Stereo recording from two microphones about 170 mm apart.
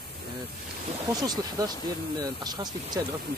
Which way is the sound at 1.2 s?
20° right (ahead or behind).